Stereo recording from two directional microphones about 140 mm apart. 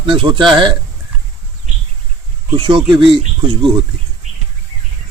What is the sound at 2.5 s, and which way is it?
Speech, 35° right (ahead or behind).